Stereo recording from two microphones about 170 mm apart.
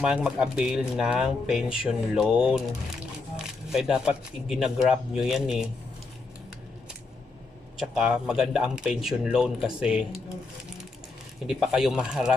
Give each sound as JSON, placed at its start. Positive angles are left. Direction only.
{"t": 0.0, "sound": "speech", "side_deg": -5}
{"t": 7.8, "sound": "speech", "side_deg": -5}
{"t": 11.4, "sound": "speech", "side_deg": -5}